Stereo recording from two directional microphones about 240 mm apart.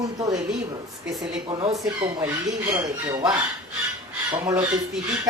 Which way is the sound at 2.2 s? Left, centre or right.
Centre.